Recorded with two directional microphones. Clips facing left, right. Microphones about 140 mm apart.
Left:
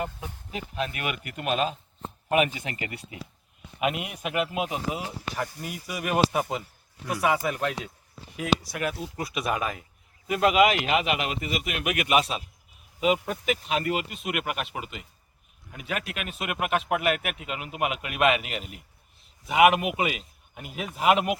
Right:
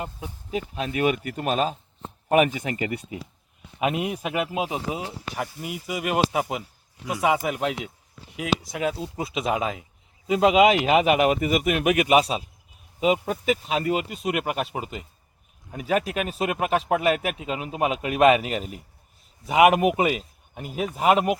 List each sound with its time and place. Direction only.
0.9 s speech: 35° right (ahead or behind)
10.8 s speech: 40° right (ahead or behind)